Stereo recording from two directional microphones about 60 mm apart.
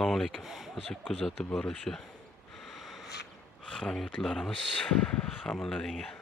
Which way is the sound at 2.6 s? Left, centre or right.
Centre.